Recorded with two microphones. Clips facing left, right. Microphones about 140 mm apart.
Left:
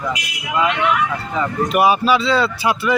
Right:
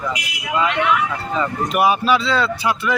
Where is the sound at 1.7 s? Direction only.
Centre (ahead or behind).